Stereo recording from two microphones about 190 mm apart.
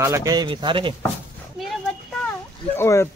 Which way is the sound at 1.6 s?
5° right (ahead or behind).